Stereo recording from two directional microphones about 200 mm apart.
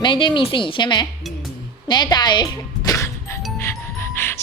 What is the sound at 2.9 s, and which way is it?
Music, 15° left (ahead or behind).